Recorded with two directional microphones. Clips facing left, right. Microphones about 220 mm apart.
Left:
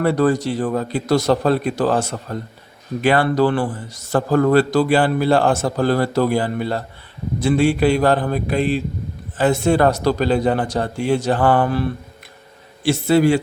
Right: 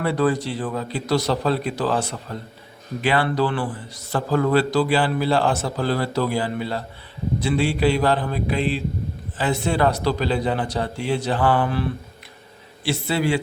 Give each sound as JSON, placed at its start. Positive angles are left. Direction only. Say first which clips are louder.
{"t": 0.0, "sound": "a man's voice", "louder": "left 4 dB", "side_deg": 45}